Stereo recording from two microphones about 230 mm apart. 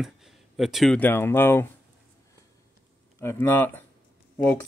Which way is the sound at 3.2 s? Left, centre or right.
Centre.